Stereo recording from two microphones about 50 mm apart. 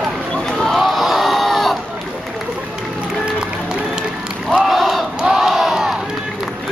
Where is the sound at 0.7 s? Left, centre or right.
Centre.